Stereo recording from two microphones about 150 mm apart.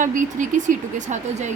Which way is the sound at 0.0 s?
60° right (ahead or behind).